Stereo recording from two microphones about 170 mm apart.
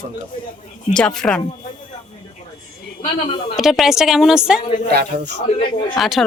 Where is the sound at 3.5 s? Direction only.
Centre (ahead or behind).